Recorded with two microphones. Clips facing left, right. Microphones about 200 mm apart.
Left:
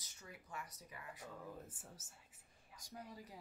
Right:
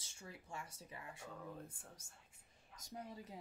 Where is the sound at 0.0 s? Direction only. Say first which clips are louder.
Right 2 dB; 25° right (ahead or behind).